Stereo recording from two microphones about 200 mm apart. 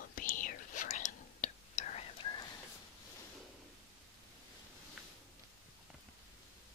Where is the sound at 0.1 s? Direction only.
45° left (ahead or behind).